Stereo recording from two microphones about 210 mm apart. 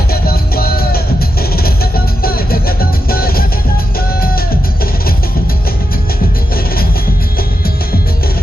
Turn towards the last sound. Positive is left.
turn(degrees=45)  # may be behind; listen again after turning